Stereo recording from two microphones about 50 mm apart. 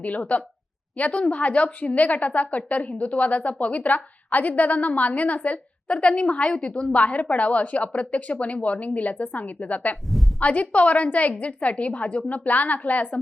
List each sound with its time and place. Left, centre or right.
0.0 s a woman's voice: left